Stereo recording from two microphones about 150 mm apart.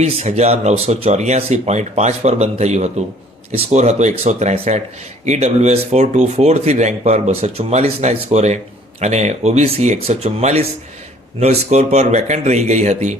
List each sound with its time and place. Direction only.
0.0 s speech: 45° right (ahead or behind)